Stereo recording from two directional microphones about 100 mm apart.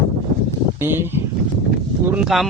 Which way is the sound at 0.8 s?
20° right (ahead or behind).